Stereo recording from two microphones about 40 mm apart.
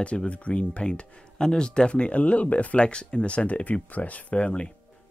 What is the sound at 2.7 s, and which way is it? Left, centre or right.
Speech, left.